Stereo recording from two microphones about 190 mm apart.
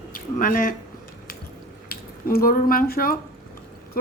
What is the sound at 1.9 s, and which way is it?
Speech, 50° left (ahead or behind).